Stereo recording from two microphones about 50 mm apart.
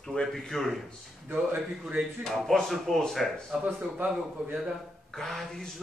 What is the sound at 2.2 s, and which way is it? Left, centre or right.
Speech, centre.